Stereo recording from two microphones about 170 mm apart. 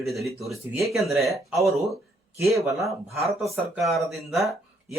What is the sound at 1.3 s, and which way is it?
Speech, 15° right (ahead or behind).